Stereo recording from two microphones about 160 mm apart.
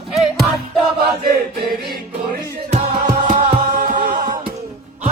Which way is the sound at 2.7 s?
50° right (ahead or behind).